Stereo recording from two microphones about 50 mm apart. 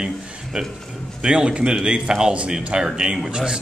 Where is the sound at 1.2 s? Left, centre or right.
Centre.